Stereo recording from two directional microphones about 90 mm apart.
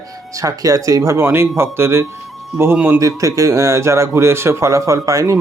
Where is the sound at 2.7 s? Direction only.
15° right (ahead or behind).